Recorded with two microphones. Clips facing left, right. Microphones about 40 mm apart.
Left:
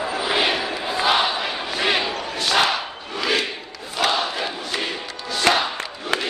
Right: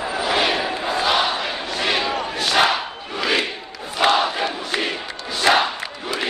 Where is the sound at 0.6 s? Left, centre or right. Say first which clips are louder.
Right 2 dB; centre.